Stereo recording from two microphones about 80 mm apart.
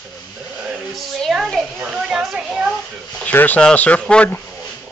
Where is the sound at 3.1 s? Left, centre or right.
Centre.